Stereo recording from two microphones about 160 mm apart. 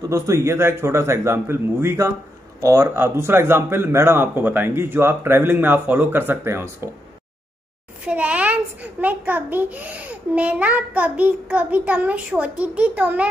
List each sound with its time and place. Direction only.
0.1 s a child's voice: 15° right (ahead or behind)
8.0 s a child's voice: 10° right (ahead or behind)